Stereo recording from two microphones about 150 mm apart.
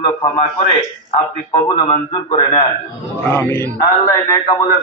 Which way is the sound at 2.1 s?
35° left (ahead or behind).